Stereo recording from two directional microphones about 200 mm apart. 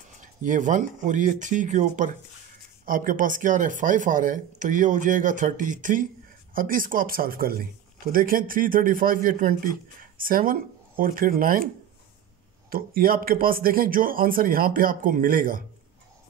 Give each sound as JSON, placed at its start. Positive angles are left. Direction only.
{"t": 0.2, "sound": "a man's voice", "side_deg": -40}
{"t": 12.6, "sound": "a man's voice", "side_deg": -50}